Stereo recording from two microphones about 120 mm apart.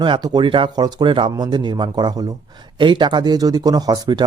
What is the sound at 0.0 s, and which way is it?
Speech, 40° right (ahead or behind).